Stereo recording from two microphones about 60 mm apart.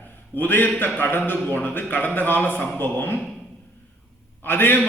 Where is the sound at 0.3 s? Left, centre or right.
Left.